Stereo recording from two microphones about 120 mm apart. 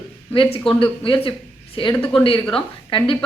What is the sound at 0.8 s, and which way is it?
Speech, 45° left (ahead or behind).